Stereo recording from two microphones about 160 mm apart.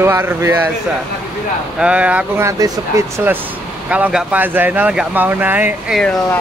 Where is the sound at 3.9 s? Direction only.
10° right (ahead or behind).